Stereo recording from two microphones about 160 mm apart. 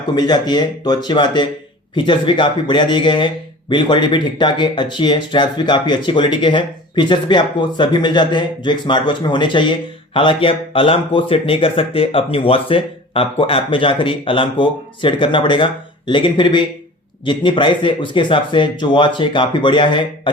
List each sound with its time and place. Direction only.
0.2 s speech: 25° left (ahead or behind)